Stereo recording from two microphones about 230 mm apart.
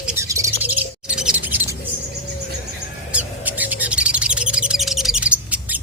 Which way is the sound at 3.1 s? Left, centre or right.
Centre.